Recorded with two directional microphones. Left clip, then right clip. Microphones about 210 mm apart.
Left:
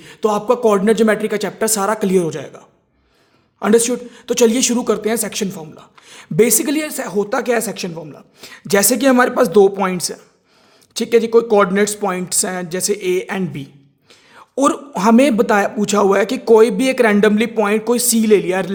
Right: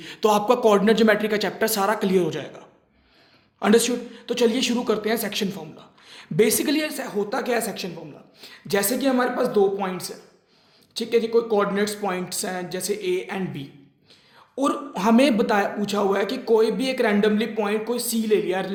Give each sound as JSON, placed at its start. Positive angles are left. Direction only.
{"t": 0.0, "sound": "speech", "side_deg": 35}